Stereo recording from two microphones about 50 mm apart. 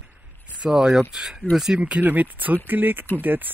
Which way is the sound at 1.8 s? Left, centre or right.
Right.